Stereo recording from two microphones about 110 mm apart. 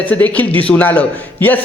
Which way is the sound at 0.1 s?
15° left (ahead or behind).